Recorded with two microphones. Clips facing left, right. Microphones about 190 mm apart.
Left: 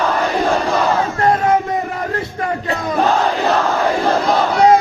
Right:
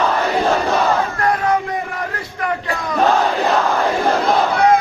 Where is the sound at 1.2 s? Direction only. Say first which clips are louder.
Left 6 dB; 25° left (ahead or behind).